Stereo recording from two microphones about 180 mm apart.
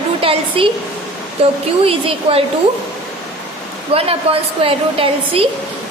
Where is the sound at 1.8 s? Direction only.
30° right (ahead or behind).